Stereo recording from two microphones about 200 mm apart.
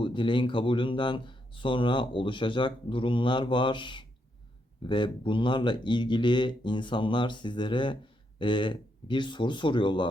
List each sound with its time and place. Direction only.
0.0 s speech: 25° left (ahead or behind)